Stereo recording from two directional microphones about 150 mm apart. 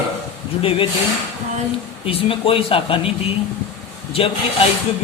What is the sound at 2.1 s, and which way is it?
Speech, 40° left (ahead or behind).